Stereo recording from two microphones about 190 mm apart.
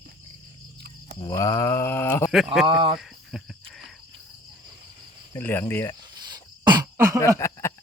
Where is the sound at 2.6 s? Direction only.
25° right (ahead or behind).